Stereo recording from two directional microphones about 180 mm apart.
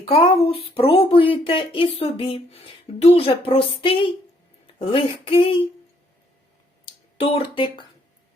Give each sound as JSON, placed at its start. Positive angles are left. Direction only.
{"t": 0.0, "sound": "speech", "side_deg": 30}
{"t": 6.8, "sound": "speech", "side_deg": 30}